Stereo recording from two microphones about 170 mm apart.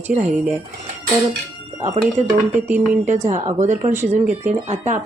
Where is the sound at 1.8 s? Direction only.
40° right (ahead or behind).